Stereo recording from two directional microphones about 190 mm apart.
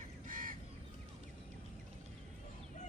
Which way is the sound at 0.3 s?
45° right (ahead or behind).